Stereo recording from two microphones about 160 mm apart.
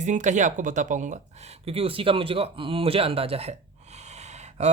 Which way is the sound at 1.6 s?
35° right (ahead or behind).